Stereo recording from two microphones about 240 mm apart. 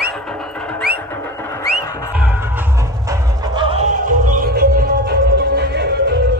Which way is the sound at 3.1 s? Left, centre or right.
Right.